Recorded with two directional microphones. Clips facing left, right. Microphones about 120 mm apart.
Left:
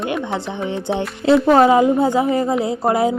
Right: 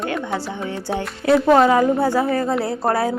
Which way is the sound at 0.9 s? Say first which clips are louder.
Left 2 dB; 25° left (ahead or behind).